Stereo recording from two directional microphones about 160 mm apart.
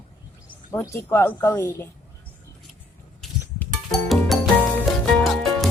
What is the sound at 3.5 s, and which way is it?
Music, 5° left (ahead or behind).